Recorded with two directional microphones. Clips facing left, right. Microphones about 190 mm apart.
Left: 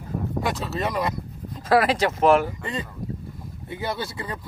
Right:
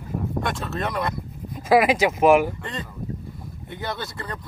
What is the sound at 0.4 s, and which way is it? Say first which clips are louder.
Speech: left 2 dB; 5° left (ahead or behind).